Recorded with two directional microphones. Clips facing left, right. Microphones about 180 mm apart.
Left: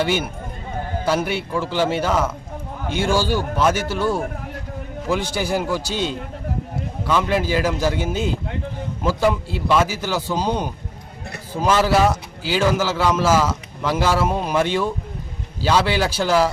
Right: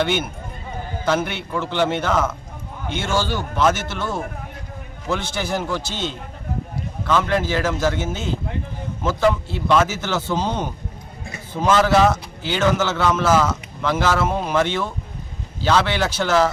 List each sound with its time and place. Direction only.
0.0 s a man's voice: 10° left (ahead or behind)